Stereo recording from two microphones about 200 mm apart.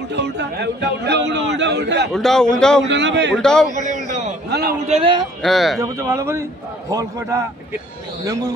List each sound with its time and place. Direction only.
0.1 s a man's voice: 60° right (ahead or behind)
2.1 s speech: centre (ahead or behind)
2.9 s a man's voice: 60° right (ahead or behind)
3.3 s speech: 5° left (ahead or behind)
3.7 s a man's voice: 40° right (ahead or behind)
4.5 s a man's voice: 50° right (ahead or behind)
4.8 s a man's voice: 30° right (ahead or behind)
5.4 s speech: centre (ahead or behind)
5.8 s speech: 15° right (ahead or behind)